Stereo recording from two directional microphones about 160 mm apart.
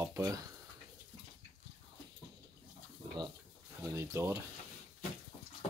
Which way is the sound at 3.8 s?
15° right (ahead or behind).